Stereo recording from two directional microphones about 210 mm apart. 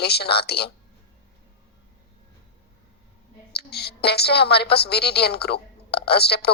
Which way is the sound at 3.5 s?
50° left (ahead or behind).